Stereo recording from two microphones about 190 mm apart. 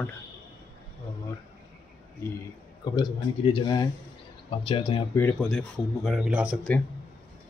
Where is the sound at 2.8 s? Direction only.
20° left (ahead or behind).